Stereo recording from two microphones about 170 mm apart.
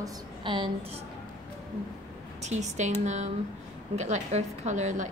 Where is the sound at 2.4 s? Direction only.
40° right (ahead or behind).